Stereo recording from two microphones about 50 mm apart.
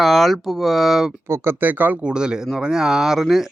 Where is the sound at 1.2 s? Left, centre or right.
Right.